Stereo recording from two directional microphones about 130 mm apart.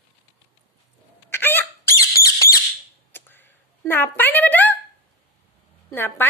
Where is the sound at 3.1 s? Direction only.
15° left (ahead or behind).